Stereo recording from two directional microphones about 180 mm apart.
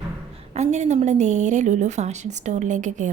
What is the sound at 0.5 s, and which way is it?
A woman's voice, 40° right (ahead or behind).